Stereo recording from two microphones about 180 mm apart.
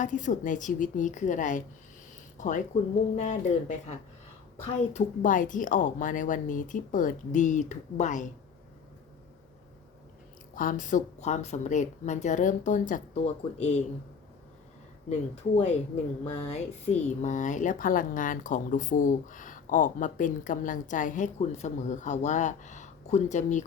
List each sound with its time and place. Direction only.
0.0 s speech: 45° left (ahead or behind)
2.7 s speech: 35° left (ahead or behind)
4.9 s speech: 45° left (ahead or behind)
10.5 s speech: 50° left (ahead or behind)
15.5 s speech: 40° left (ahead or behind)